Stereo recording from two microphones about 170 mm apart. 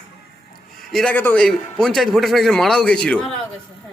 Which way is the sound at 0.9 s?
5° left (ahead or behind).